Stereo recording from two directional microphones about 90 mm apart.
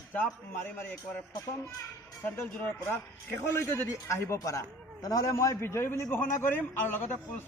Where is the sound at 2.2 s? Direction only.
20° left (ahead or behind).